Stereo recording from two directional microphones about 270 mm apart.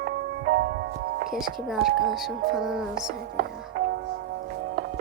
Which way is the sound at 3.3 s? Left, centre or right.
Right.